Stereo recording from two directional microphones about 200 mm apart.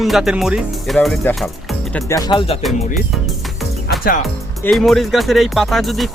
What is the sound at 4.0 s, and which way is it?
Speech, 45° left (ahead or behind).